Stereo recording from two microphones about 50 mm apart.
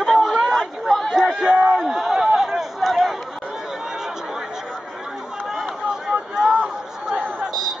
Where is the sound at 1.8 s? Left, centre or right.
Centre.